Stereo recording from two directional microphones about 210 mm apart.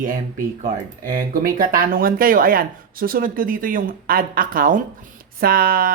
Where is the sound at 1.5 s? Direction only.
45° right (ahead or behind).